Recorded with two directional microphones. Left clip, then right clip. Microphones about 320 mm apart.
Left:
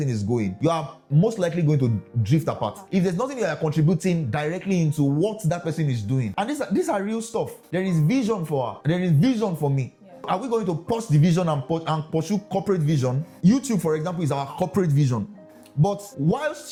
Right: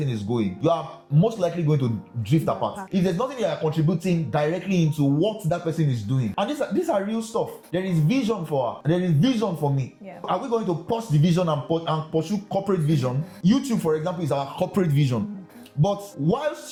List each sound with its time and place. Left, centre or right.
0.3 s speech: left
13.5 s speech: left
15.8 s speech: left